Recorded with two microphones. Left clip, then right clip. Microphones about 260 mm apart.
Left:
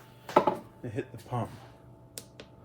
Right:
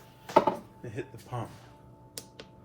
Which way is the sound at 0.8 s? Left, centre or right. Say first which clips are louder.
Left 6 dB; left.